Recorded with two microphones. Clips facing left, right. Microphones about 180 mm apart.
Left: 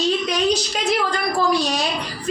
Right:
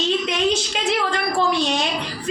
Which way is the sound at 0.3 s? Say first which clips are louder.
Left 1 dB; 25° right (ahead or behind).